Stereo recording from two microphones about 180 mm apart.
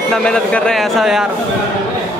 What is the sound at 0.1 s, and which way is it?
A man's voice, 5° left (ahead or behind).